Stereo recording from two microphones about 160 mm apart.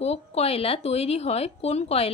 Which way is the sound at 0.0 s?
40° left (ahead or behind).